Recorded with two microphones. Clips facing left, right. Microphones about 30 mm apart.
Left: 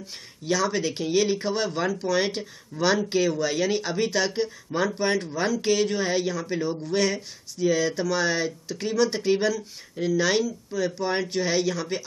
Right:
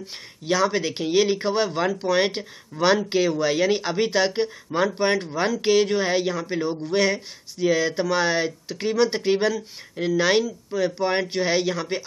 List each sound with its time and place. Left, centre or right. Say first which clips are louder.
0.0 s speech: right 2 dB; right